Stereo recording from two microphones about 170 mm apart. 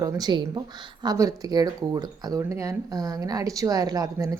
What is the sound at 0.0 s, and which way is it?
Speech, 20° right (ahead or behind).